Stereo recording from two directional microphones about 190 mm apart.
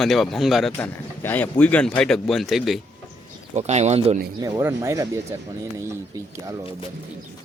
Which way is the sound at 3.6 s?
35° right (ahead or behind).